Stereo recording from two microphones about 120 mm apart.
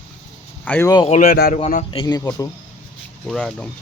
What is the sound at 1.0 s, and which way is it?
Speech, 60° left (ahead or behind).